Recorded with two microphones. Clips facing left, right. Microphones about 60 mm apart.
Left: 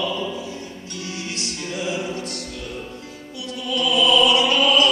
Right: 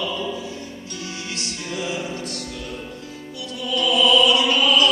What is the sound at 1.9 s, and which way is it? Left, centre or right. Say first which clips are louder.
Music: left 1 dB; left.